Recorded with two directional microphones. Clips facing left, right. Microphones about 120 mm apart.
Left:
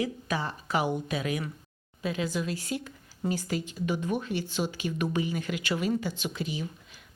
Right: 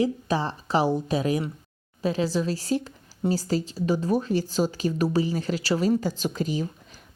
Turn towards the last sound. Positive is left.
turn(degrees=-40)  # may be behind; listen again after turning